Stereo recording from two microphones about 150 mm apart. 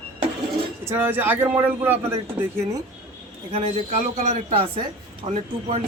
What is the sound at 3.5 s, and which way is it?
A man's voice, 45° right (ahead or behind).